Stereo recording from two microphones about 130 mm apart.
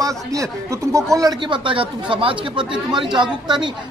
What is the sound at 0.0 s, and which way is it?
Speech, 25° right (ahead or behind).